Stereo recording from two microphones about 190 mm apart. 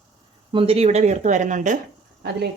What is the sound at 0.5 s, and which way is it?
Speech, 30° right (ahead or behind).